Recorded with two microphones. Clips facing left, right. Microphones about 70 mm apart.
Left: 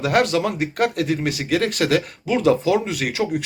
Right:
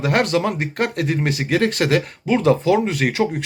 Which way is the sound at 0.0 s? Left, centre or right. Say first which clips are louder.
Even; right.